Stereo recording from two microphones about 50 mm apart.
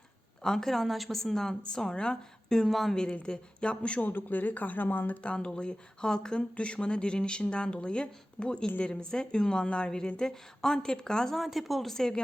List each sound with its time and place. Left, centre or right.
0.4 s a woman's voice: centre
2.9 s a woman's voice: centre
4.0 s speech: left
5.2 s a woman's voice: left
11.3 s speech: centre